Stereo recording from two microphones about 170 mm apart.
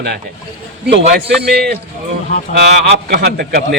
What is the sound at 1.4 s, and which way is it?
Speech, 75° right (ahead or behind).